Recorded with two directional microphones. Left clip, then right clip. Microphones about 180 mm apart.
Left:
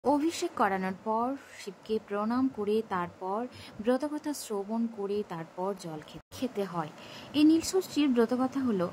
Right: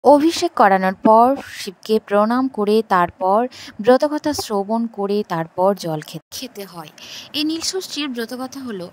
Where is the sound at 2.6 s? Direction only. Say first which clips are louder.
Right 15 dB; 55° right (ahead or behind).